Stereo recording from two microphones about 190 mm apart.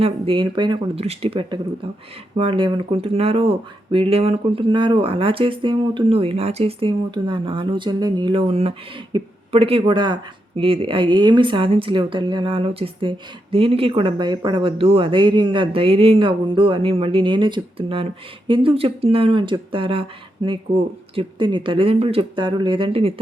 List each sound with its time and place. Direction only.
0.0 s speech: 25° right (ahead or behind)